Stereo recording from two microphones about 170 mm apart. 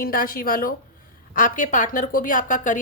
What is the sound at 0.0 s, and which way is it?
A woman's voice, 60° left (ahead or behind).